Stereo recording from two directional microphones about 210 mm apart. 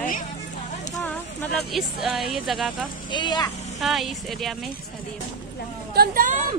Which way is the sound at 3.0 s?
20° left (ahead or behind).